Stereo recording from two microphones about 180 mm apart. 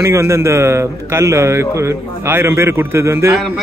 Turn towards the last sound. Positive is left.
turn(degrees=0)  # may be behind; listen again after turning